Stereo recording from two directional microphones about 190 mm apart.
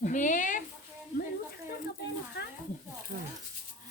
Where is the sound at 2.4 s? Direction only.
65° left (ahead or behind).